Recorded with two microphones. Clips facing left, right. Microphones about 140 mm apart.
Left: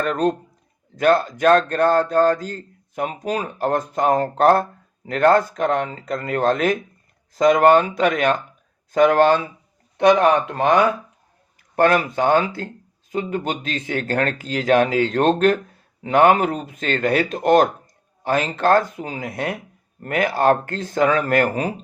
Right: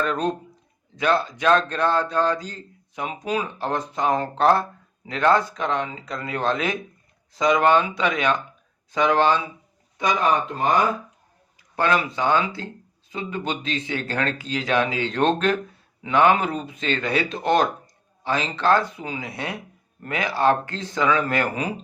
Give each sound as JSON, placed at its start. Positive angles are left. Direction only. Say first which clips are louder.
{"t": 0.0, "sound": "a man's voice", "louder": "left 4 dB", "side_deg": 50}
{"t": 10.0, "sound": "speech", "louder": "left 7 dB", "side_deg": 65}
{"t": 11.8, "sound": "a man's voice", "louder": "left 5 dB", "side_deg": 50}